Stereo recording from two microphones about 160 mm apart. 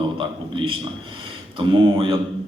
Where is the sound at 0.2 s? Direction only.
30° right (ahead or behind).